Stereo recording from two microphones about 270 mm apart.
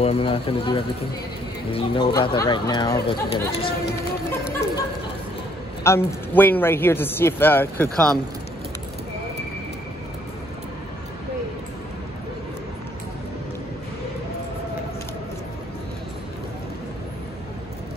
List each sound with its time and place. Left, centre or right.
0.0 s speech: left
5.9 s speech: centre